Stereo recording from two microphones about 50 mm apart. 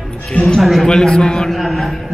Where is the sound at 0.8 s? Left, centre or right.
Centre.